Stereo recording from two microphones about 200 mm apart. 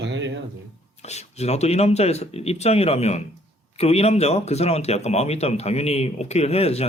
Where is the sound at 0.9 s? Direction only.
35° left (ahead or behind).